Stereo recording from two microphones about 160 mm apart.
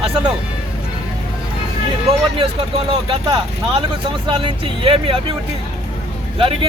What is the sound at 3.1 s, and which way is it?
Speech, 35° right (ahead or behind).